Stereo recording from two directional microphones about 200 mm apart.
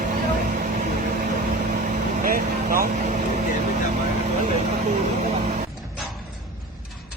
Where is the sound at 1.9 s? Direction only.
45° right (ahead or behind).